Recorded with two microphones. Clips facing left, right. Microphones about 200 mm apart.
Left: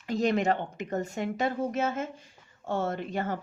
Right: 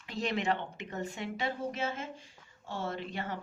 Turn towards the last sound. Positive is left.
turn(degrees=45)  # may be behind; listen again after turning